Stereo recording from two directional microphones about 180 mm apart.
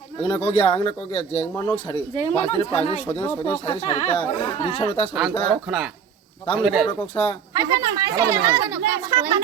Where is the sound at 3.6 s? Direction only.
30° left (ahead or behind).